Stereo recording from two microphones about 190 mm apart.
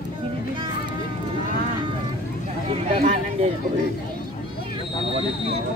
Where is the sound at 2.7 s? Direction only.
30° right (ahead or behind).